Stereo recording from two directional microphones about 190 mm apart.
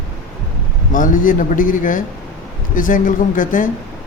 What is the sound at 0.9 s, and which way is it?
A man's voice, 45° left (ahead or behind).